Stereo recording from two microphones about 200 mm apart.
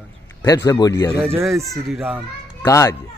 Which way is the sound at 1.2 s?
10° right (ahead or behind).